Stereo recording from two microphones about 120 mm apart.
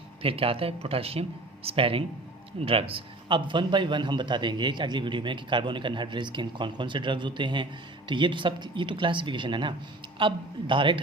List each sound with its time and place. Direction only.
0.2 s a man's voice: 50° right (ahead or behind)